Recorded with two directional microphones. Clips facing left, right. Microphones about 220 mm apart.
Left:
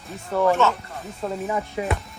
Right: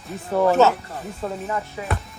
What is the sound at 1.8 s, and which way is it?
Music, 15° left (ahead or behind).